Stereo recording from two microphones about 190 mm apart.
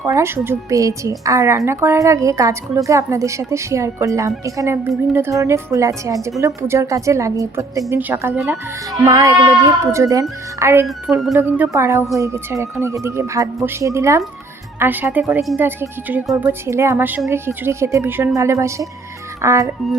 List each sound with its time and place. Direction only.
0.0 s a woman's voice: 15° right (ahead or behind)
10.8 s a woman's voice: centre (ahead or behind)